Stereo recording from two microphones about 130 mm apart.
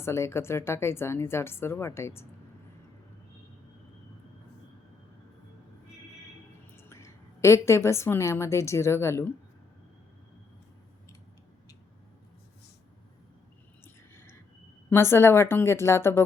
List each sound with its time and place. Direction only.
0.0 s speech: 20° left (ahead or behind)
6.7 s a woman's voice: 20° left (ahead or behind)
13.8 s a sound: 20° left (ahead or behind)
14.8 s speech: 20° left (ahead or behind)